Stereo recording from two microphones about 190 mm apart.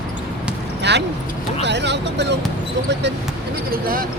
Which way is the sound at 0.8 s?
65° right (ahead or behind).